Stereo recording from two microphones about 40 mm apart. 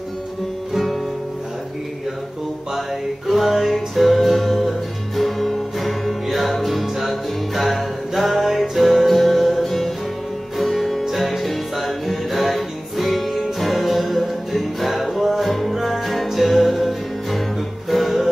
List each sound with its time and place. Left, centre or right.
3.3 s music: centre